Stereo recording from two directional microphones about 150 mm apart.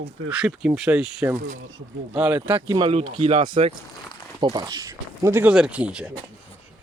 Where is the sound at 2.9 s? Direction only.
40° right (ahead or behind); by 6.1 s 5° right (ahead or behind).